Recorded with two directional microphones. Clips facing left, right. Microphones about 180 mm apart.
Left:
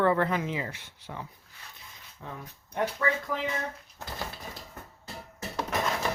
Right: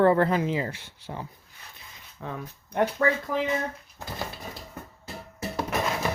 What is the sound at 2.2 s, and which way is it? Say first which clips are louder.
Speech: right 6 dB; 75° right (ahead or behind).